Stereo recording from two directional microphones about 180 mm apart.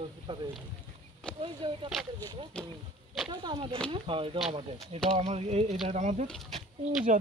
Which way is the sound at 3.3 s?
30° right (ahead or behind).